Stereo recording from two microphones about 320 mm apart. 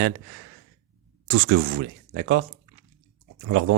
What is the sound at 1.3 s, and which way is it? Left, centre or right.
Speech, right.